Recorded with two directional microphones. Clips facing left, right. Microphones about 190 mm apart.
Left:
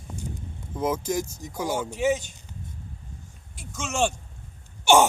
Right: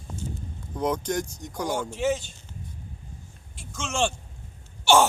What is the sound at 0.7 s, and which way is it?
Speech, 5° left (ahead or behind).